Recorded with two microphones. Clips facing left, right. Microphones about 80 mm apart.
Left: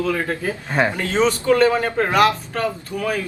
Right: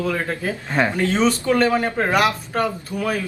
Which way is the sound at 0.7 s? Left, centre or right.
Centre.